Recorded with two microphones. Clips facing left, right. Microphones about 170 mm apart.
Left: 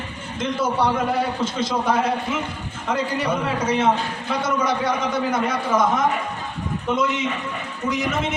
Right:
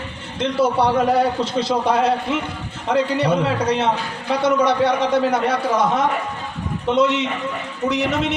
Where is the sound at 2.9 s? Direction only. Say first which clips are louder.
Right 5 dB; 70° right (ahead or behind).